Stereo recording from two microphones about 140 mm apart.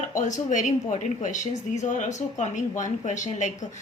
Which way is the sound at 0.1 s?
60° left (ahead or behind).